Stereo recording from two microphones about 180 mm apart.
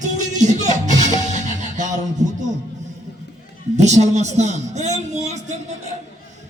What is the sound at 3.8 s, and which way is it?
A man's voice, 40° right (ahead or behind).